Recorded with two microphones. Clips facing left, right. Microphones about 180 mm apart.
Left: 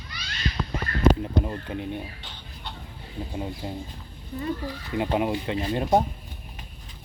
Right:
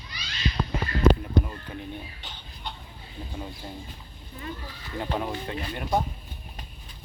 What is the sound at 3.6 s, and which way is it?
Speech, 20° left (ahead or behind).